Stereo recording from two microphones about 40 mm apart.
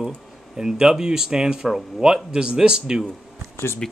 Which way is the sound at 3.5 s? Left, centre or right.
Left.